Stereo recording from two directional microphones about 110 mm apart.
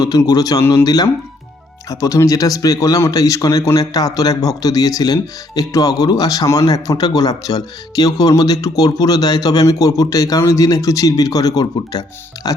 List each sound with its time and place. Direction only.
0.2 s speech: 35° left (ahead or behind)
0.6 s speech: 20° left (ahead or behind)
0.9 s speech: 35° left (ahead or behind)